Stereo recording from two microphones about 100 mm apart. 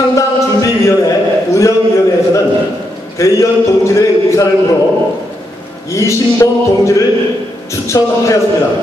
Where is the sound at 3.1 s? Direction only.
30° left (ahead or behind).